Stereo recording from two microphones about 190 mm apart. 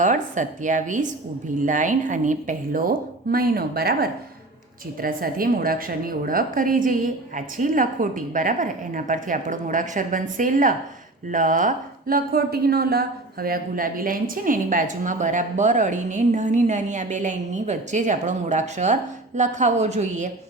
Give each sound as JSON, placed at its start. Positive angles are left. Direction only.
{"t": 0.0, "sound": "a woman's voice", "side_deg": -40}